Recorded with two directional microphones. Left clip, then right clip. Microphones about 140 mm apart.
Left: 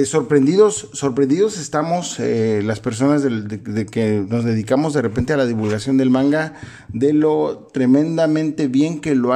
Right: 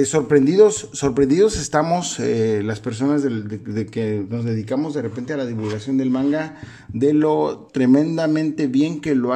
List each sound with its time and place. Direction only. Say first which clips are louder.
0.0 s speech: even; centre (ahead or behind)
1.1 s speech: right 1 dB; 5° right (ahead or behind); by 4.7 s 35° left (ahead or behind)
4.7 s a man's voice: left 7 dB; 55° left (ahead or behind)
7.0 s speech: left 1 dB; centre (ahead or behind)